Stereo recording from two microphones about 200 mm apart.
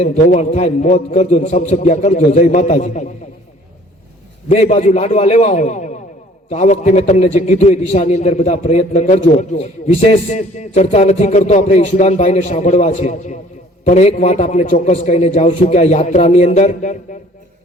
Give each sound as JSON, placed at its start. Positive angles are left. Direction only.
{"t": 0.0, "sound": "a man's voice", "side_deg": 35}
{"t": 4.4, "sound": "a man's voice", "side_deg": 35}